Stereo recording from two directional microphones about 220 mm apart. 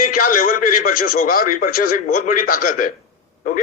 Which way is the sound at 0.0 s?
40° left (ahead or behind).